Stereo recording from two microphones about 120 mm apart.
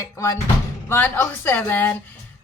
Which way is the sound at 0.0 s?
20° left (ahead or behind).